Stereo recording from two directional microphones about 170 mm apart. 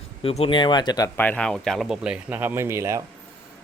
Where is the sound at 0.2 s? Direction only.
35° left (ahead or behind).